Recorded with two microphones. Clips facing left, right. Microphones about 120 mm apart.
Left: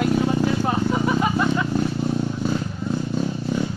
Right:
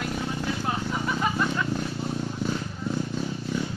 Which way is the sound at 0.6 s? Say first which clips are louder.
Left 7 dB; 35° left (ahead or behind).